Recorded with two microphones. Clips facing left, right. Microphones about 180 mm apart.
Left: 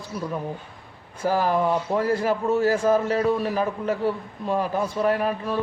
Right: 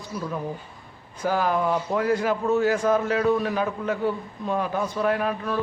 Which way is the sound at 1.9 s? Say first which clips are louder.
Right 1 dB; 30° left (ahead or behind).